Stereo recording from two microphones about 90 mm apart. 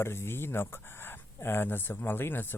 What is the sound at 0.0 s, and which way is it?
Speech, 25° left (ahead or behind).